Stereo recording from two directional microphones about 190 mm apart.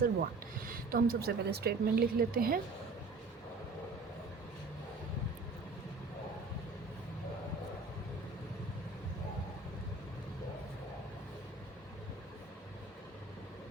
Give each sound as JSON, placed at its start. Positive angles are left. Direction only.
{"t": 0.0, "sound": "speech", "side_deg": -50}